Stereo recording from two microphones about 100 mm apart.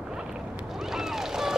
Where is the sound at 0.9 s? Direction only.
5° right (ahead or behind).